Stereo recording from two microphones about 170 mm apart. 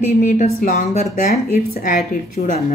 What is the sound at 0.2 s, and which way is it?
A woman's voice, 45° left (ahead or behind).